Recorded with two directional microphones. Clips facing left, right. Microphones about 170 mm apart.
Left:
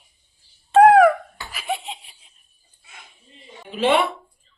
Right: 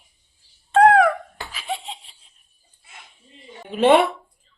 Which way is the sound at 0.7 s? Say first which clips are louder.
Left 3 dB; 10° left (ahead or behind).